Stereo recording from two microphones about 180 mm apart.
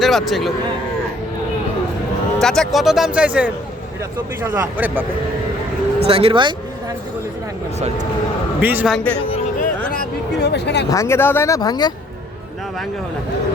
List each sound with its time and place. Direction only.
0.0 s a man's voice: centre (ahead or behind)
2.4 s speech: centre (ahead or behind)
6.1 s speech: 30° right (ahead or behind)
8.6 s speech: 10° right (ahead or behind)
9.6 s a sound: 55° left (ahead or behind); by 10.8 s 70° left (ahead or behind)
10.9 s speech: 15° left (ahead or behind)